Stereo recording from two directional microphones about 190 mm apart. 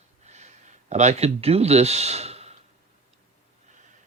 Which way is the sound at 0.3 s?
40° right (ahead or behind).